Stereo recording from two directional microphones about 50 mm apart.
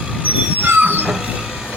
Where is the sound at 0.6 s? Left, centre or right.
Right.